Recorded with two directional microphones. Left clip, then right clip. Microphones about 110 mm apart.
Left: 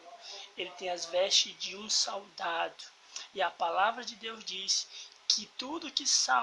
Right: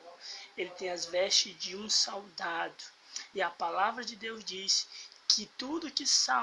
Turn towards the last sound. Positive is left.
turn(degrees=15)  # may be behind; listen again after turning